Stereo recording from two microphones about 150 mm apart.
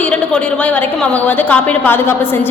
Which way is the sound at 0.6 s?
10° left (ahead or behind).